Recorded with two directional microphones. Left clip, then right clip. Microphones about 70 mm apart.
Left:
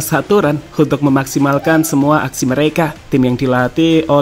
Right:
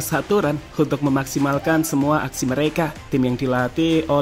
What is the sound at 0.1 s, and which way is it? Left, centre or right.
Speech, left.